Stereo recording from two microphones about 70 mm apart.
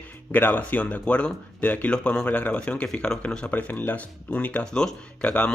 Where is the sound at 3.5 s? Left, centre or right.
Left.